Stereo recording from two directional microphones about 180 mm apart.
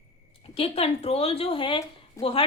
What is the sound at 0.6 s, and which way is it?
A woman's voice, 35° left (ahead or behind).